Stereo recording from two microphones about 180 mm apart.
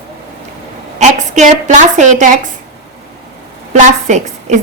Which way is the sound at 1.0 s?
40° right (ahead or behind).